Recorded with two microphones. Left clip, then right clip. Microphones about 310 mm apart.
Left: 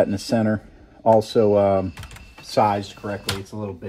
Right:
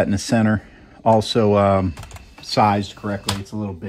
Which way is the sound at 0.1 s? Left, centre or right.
Right.